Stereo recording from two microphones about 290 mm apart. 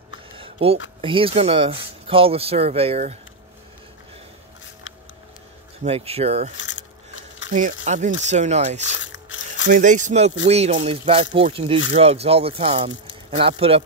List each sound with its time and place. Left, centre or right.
0.4 s a sound: centre
1.0 s speech: centre
5.9 s speech: right
6.5 s speech: left
7.8 s speech: right
8.9 s a sound: left
9.7 s speech: right